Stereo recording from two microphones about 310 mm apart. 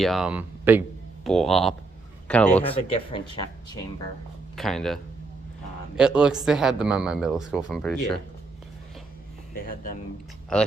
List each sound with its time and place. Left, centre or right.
0.0 s speech: centre
3.1 s speech: centre
4.5 s speech: centre
6.0 s speech: centre
9.6 s speech: left
10.5 s speech: centre